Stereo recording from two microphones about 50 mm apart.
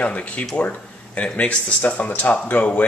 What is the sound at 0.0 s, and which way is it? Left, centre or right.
Speech, left.